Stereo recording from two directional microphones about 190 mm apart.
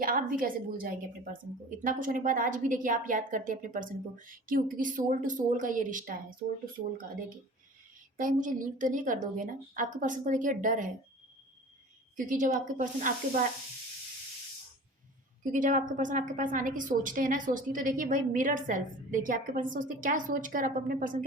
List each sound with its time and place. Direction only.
0.0 s a woman's voice: 50° right (ahead or behind)
8.1 s a woman's voice: 45° right (ahead or behind)
12.1 s a woman's voice: 45° right (ahead or behind)
15.4 s a woman's voice: 45° right (ahead or behind)